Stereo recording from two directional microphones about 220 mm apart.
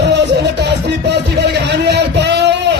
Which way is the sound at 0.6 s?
50° right (ahead or behind).